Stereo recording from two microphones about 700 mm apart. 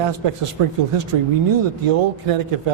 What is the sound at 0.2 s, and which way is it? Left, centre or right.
Speech, right.